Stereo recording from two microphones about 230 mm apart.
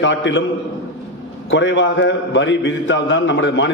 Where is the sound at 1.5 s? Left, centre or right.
Left.